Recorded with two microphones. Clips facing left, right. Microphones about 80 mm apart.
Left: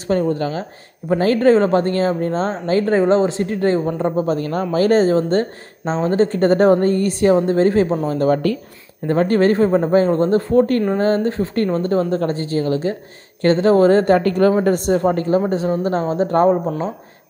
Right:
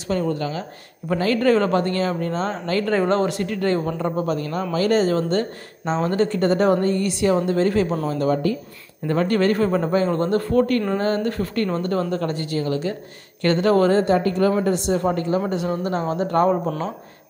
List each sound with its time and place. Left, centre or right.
0.1 s speech: left
8.4 s speech: left
9.0 s speech: left
13.9 s speech: left